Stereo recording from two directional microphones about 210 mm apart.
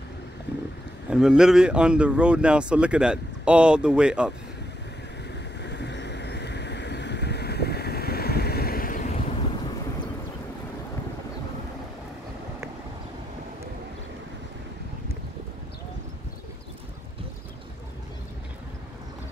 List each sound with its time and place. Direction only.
1.1 s speech: 5° right (ahead or behind)
5.6 s boat: 55° left (ahead or behind)